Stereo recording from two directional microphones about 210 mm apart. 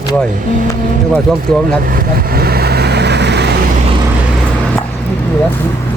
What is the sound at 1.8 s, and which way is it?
Vehicle, 45° right (ahead or behind).